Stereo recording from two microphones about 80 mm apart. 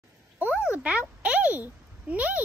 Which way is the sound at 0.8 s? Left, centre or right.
Centre.